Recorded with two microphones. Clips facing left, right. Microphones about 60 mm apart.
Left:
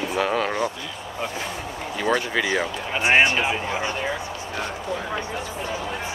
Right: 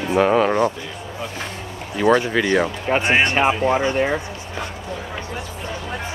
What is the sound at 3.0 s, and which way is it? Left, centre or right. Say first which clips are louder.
Speech: left 3 dB; centre.